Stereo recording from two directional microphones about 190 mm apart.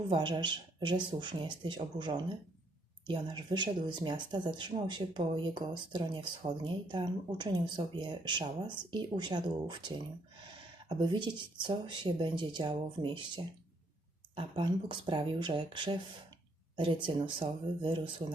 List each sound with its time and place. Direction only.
0.1 s speech: 25° right (ahead or behind)
10.8 s speech: 25° right (ahead or behind)